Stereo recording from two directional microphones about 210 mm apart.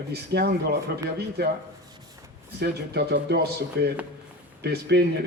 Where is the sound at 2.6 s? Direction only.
50° right (ahead or behind).